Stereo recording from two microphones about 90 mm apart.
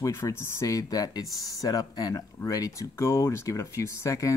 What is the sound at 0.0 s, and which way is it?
Speech, 30° left (ahead or behind).